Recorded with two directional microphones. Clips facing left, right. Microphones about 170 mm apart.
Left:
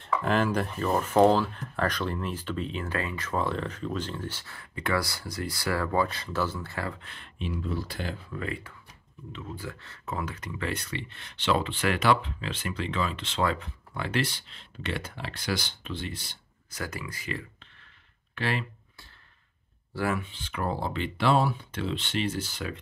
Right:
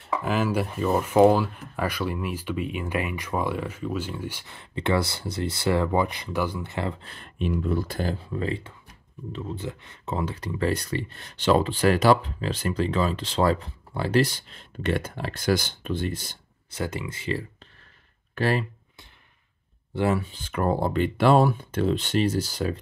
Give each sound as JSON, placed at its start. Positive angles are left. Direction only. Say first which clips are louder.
{"t": 0.0, "sound": "speech", "louder": "even", "side_deg": -5}
{"t": 7.3, "sound": "speech", "louder": "right 6 dB", "side_deg": -50}
{"t": 16.7, "sound": "speech", "louder": "right 6 dB", "side_deg": -25}
{"t": 18.3, "sound": "speech", "louder": "right 6 dB", "side_deg": -40}
{"t": 19.9, "sound": "speech", "louder": "right 5 dB", "side_deg": -20}
{"t": 20.2, "sound": "speech", "louder": "right 5 dB", "side_deg": -40}